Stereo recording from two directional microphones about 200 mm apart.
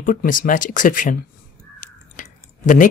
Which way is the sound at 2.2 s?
40° left (ahead or behind).